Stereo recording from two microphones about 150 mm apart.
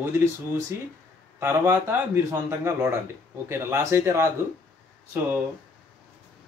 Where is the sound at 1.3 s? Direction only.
15° right (ahead or behind).